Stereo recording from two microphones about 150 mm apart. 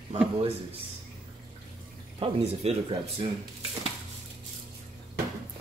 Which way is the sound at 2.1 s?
40° right (ahead or behind).